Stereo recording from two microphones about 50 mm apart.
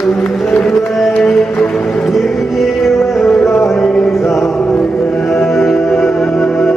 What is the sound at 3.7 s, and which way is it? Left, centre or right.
Music, centre.